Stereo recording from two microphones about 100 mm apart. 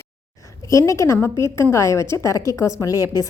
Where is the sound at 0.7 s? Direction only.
30° left (ahead or behind).